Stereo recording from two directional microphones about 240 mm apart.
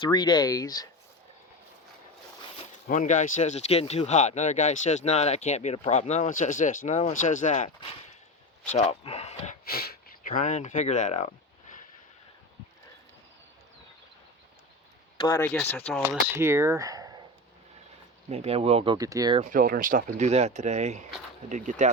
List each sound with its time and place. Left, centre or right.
0.0 s speech: centre
2.8 s speech: left
8.7 s speech: left
15.2 s speech: centre
16.0 s speech: centre
18.3 s speech: right
19.5 s speech: right